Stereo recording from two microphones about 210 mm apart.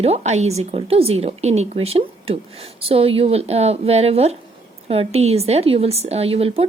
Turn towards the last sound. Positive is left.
turn(degrees=-30)  # may be behind; listen again after turning